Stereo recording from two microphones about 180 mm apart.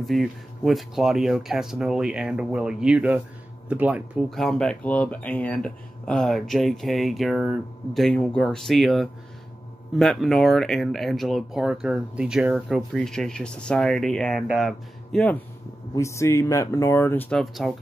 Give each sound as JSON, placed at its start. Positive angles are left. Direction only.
{"t": 0.0, "sound": "speech", "side_deg": 0}
{"t": 4.3, "sound": "speech", "side_deg": 5}